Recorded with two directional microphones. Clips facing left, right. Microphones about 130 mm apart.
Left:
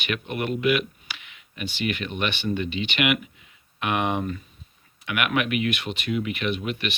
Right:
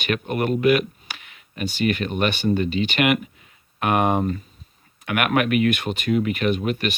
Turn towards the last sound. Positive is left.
turn(degrees=-45)  # may be behind; listen again after turning